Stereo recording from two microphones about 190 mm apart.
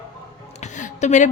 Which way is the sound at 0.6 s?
40° left (ahead or behind).